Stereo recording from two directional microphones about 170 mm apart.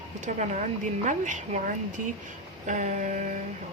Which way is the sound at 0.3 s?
45° right (ahead or behind).